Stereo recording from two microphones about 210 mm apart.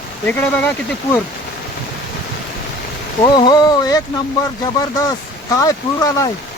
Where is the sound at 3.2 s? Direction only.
20° left (ahead or behind).